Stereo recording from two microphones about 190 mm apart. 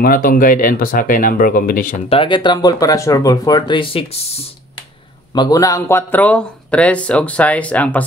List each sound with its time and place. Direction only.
0.0 s speech: 50° left (ahead or behind)
2.0 s speech: 25° left (ahead or behind)
5.3 s speech: 20° left (ahead or behind)